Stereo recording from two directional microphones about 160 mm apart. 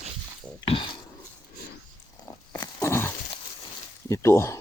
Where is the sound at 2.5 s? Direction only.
20° left (ahead or behind).